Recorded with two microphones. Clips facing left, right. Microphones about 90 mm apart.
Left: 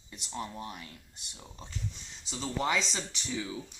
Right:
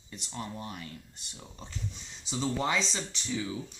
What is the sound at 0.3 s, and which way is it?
Speech, 10° left (ahead or behind).